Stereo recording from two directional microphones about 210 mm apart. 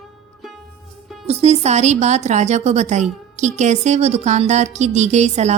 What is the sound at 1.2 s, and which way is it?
A woman's voice, 30° right (ahead or behind).